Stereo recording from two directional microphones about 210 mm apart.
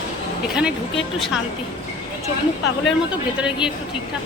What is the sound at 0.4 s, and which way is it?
Speech, 5° right (ahead or behind).